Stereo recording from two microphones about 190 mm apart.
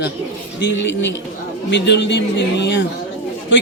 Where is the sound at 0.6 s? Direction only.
70° left (ahead or behind).